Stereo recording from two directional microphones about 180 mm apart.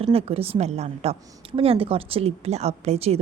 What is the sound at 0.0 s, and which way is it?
A woman's voice, 35° right (ahead or behind).